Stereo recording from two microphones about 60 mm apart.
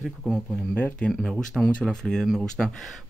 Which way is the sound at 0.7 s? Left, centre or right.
Left.